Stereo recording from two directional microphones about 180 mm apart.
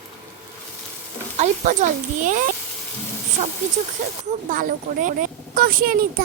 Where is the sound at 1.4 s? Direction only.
45° right (ahead or behind).